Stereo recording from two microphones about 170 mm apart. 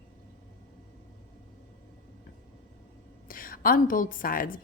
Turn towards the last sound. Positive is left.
turn(degrees=55)  # may be behind; listen again after turning